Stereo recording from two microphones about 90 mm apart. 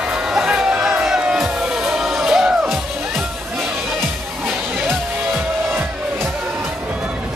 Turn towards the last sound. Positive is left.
turn(degrees=-25)  # may be behind; listen again after turning